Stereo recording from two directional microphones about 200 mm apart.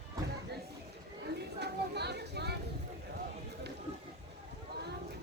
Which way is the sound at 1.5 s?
55° right (ahead or behind).